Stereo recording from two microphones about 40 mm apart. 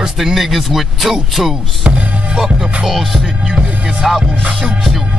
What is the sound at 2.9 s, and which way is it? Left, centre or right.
Speech, centre.